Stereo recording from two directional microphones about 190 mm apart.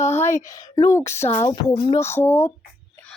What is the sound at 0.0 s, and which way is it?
Speech, 15° left (ahead or behind).